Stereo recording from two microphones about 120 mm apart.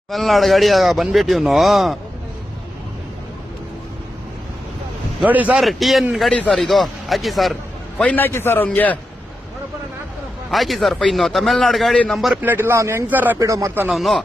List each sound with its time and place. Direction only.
0.1 s speech: centre (ahead or behind)
5.2 s speech: 15° right (ahead or behind)
5.6 s speech: centre (ahead or behind)
7.9 s a man's voice: 15° left (ahead or behind)
10.5 s speech: centre (ahead or behind)
12.4 s speech: 15° right (ahead or behind)
13.4 s speech: 25° right (ahead or behind)
13.8 s speech: centre (ahead or behind)